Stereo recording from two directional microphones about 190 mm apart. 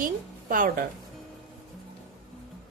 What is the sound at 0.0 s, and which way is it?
Speech, 45° right (ahead or behind).